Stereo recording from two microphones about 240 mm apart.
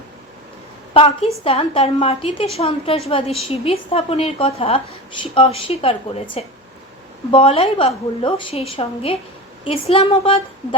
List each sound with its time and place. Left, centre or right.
0.9 s a woman's voice: left
7.3 s a woman's voice: left